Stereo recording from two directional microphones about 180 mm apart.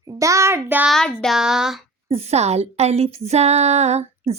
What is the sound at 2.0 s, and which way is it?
Speech, 35° right (ahead or behind).